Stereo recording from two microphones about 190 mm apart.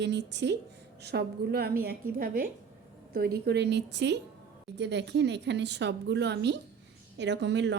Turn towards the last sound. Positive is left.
turn(degrees=-70)  # may be behind; listen again after turning